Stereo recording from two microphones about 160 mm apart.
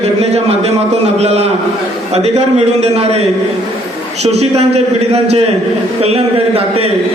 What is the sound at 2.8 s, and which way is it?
Speech, 40° right (ahead or behind).